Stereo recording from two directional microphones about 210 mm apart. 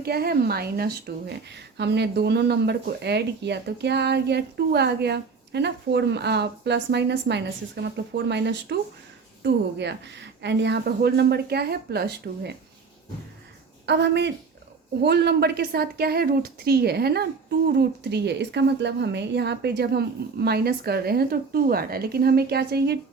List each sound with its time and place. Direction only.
0.0 s speech: 50° right (ahead or behind)
13.8 s speech: 55° right (ahead or behind)